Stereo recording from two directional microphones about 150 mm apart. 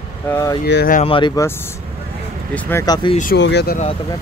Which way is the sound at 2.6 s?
15° left (ahead or behind).